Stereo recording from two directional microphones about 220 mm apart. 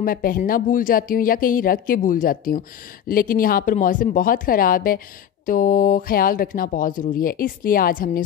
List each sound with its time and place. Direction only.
0.0 s speech: 40° left (ahead or behind)